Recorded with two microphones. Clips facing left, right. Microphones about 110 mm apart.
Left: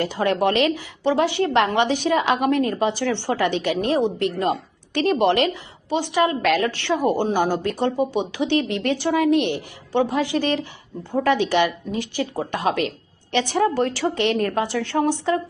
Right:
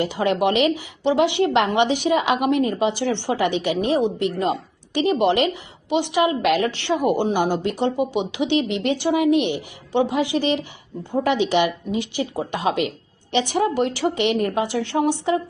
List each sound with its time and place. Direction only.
0.0 s a woman's voice: 15° right (ahead or behind)